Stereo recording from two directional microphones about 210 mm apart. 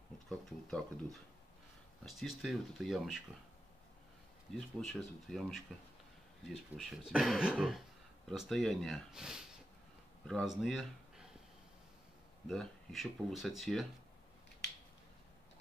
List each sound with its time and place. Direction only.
0.3 s speech: centre (ahead or behind)
4.8 s speech: centre (ahead or behind)
12.4 s speech: centre (ahead or behind)